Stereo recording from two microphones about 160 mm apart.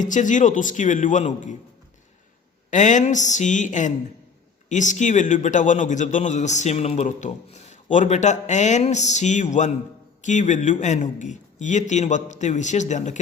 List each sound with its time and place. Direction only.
0.0 s a man's voice: 50° left (ahead or behind)
2.6 s a man's voice: 50° left (ahead or behind)